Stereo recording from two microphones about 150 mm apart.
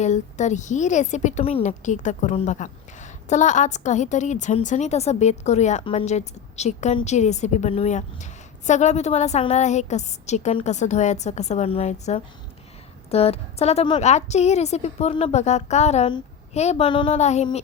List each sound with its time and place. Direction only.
0.0 s a woman's voice: 50° left (ahead or behind); by 17.1 s 35° left (ahead or behind)
17.1 s a woman's voice: 50° left (ahead or behind)